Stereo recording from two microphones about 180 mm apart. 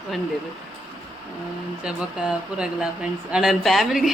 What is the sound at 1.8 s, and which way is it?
Speech, 5° right (ahead or behind).